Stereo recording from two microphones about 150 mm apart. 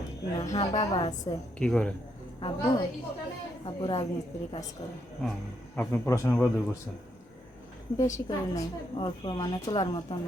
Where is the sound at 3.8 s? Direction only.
30° left (ahead or behind).